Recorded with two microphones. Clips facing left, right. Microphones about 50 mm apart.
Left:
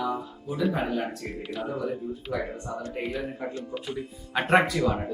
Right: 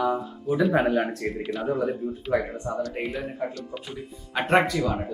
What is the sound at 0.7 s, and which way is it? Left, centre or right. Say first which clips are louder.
Speech: right 7 dB; right.